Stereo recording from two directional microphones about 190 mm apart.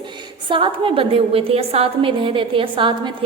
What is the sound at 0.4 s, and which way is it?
A woman's voice, 25° right (ahead or behind).